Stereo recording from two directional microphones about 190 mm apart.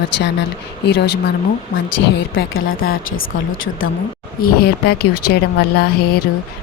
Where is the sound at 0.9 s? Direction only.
60° left (ahead or behind).